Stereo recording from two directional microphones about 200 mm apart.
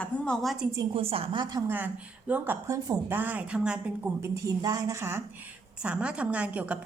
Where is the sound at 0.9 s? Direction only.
30° right (ahead or behind).